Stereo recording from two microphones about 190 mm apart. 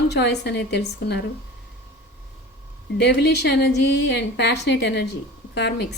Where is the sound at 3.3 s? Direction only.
60° left (ahead or behind).